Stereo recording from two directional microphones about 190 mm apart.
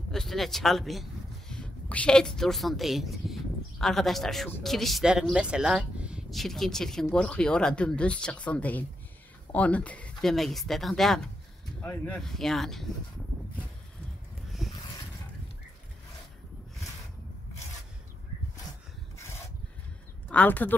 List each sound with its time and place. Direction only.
0.1 s a woman's voice: centre (ahead or behind)
14.6 s a sound: centre (ahead or behind)
19.1 s rub: 15° left (ahead or behind)
20.2 s speech: 10° left (ahead or behind)